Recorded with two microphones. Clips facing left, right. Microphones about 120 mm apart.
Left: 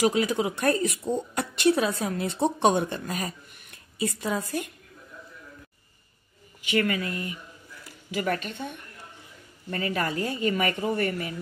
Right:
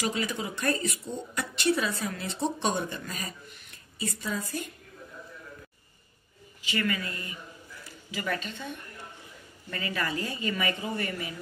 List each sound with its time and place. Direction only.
0.0 s a woman's voice: 55° left (ahead or behind)
6.6 s a woman's voice: 55° left (ahead or behind)
9.7 s speech: 45° left (ahead or behind)